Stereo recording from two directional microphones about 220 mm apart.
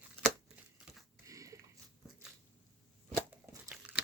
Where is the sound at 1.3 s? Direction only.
15° right (ahead or behind).